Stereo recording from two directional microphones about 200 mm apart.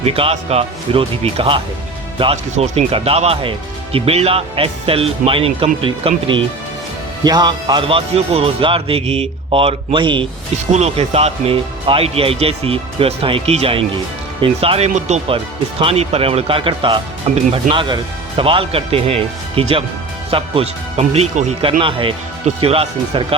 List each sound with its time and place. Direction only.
0.0 s speech: 30° right (ahead or behind)